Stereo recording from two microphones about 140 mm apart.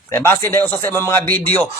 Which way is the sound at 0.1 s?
15° left (ahead or behind).